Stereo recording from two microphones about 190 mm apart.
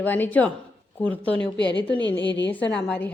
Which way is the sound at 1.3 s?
25° right (ahead or behind).